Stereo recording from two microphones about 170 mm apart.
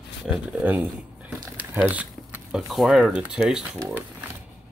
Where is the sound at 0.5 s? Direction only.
5° right (ahead or behind).